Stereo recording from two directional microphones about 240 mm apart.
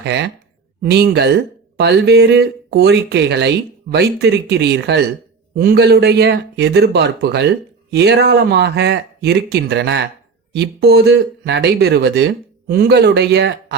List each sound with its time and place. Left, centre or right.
0.0 s speech: right